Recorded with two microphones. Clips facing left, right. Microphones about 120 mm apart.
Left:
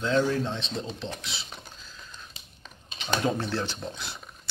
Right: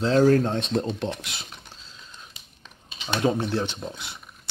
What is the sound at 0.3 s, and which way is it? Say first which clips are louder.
Speech: right 9 dB; 55° right (ahead or behind).